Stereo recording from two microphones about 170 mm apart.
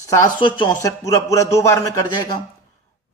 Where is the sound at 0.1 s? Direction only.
25° left (ahead or behind).